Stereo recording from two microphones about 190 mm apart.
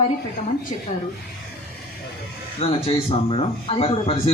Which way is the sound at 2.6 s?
30° left (ahead or behind).